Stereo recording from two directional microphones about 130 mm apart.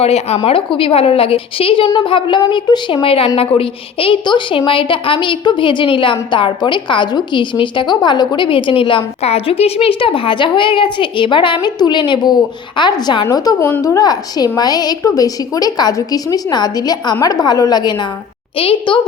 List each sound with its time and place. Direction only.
0.0 s a woman's voice: 55° left (ahead or behind); by 13.6 s 30° left (ahead or behind)
13.6 s a woman's voice: 15° left (ahead or behind)
13.8 s a woman's voice: 30° left (ahead or behind)
18.5 s a woman's voice: 45° left (ahead or behind)